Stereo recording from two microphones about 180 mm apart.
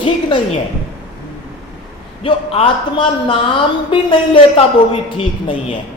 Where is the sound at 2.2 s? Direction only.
30° left (ahead or behind).